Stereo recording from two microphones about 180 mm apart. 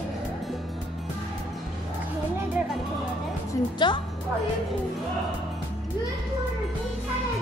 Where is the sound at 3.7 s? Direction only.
25° left (ahead or behind).